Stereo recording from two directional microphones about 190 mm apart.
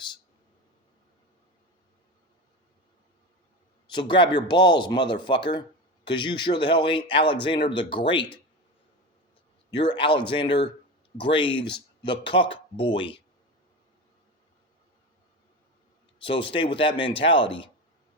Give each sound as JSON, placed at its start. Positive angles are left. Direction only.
{"t": 3.8, "sound": "a man's voice", "side_deg": 25}
{"t": 9.9, "sound": "speech", "side_deg": 25}
{"t": 16.1, "sound": "speech", "side_deg": 25}